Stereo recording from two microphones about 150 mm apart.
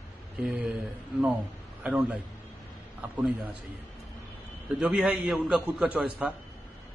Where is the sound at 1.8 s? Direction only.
5° right (ahead or behind).